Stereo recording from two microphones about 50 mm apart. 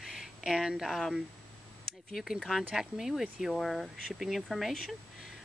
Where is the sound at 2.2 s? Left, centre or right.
Centre.